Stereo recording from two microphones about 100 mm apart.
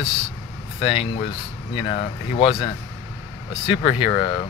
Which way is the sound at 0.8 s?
65° left (ahead or behind).